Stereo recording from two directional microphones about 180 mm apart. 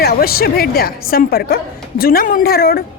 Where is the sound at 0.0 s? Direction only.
60° left (ahead or behind).